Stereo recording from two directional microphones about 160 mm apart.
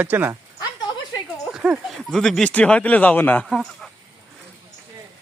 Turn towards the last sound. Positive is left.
turn(degrees=0)  # may be behind; listen again after turning